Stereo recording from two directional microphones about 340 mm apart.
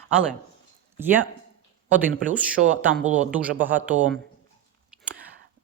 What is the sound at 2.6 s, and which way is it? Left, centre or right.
Speech, right.